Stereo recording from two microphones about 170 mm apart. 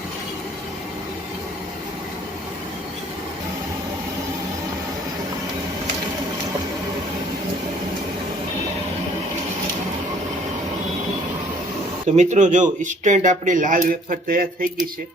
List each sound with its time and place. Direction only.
12.1 s speech: 45° right (ahead or behind)